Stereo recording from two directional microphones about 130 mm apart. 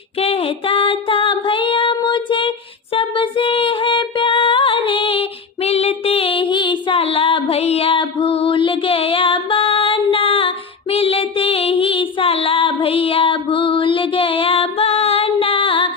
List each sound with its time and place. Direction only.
0.2 s child singing: 45° left (ahead or behind)
2.9 s music: 45° left (ahead or behind)
10.9 s female singing: 45° left (ahead or behind)